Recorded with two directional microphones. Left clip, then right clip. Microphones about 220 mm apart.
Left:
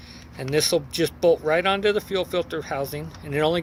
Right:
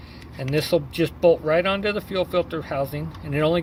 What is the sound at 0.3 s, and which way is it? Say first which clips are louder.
Speech: even; 50° left (ahead or behind).